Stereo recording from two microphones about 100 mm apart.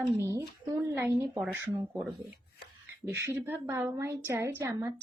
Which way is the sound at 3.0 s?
25° right (ahead or behind).